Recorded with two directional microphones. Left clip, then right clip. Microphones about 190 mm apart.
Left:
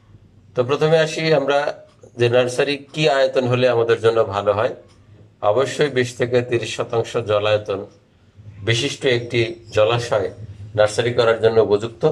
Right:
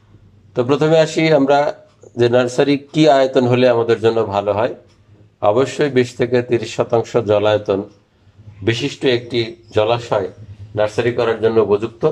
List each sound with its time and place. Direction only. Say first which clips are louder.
0.6 s speech: right 3 dB; 20° right (ahead or behind)